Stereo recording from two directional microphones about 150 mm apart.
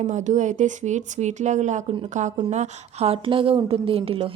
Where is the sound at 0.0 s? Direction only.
55° right (ahead or behind).